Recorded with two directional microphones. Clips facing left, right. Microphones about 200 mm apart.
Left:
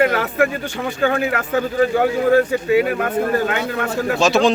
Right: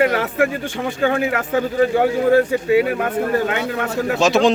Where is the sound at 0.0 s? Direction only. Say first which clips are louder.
Even; 25° right (ahead or behind).